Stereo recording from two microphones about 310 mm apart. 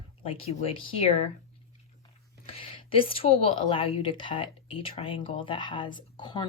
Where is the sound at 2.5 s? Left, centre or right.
Centre.